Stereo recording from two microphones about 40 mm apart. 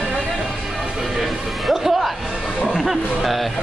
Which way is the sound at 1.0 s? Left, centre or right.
Centre.